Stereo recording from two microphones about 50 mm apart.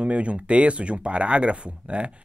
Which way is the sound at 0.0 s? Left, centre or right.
Right.